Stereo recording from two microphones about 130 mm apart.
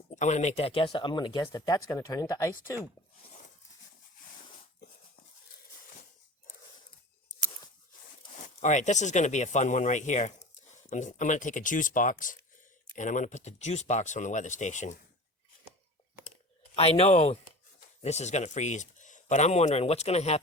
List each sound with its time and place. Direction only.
0.1 s speech: 65° left (ahead or behind); by 2.8 s 25° left (ahead or behind)
8.6 s speech: 65° left (ahead or behind); by 12.4 s 90° left
13.0 s speech: 75° left (ahead or behind)
16.7 s speech: 50° left (ahead or behind)